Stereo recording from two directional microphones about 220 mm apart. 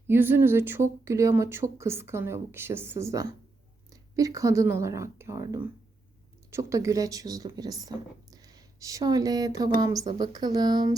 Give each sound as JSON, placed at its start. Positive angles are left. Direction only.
{"t": 0.1, "sound": "speech", "side_deg": -10}